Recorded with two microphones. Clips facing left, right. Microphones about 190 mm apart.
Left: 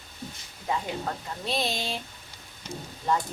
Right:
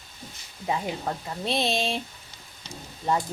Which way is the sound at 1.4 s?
25° right (ahead or behind).